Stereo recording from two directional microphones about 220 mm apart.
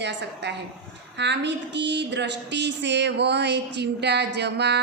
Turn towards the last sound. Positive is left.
turn(degrees=-50)  # may be behind; listen again after turning